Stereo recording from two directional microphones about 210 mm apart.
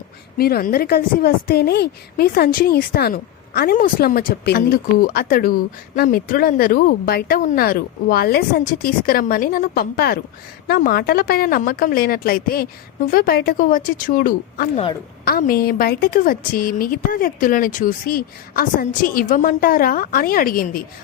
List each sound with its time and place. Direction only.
0.3 s a woman's voice: 45° left (ahead or behind)